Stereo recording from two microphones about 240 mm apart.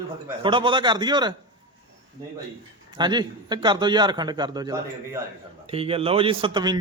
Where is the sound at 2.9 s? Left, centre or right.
Centre.